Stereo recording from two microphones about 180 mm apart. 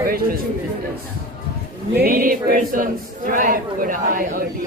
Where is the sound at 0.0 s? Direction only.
55° right (ahead or behind).